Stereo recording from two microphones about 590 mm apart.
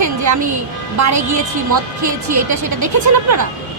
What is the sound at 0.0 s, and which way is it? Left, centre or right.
Music, right.